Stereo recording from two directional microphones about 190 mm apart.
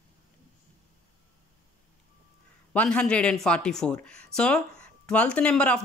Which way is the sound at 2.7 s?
5° left (ahead or behind).